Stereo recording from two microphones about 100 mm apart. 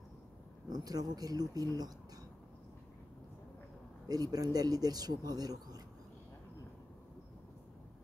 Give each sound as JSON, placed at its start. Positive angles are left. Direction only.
{"t": 0.7, "sound": "speech", "side_deg": -40}
{"t": 4.1, "sound": "speech", "side_deg": -40}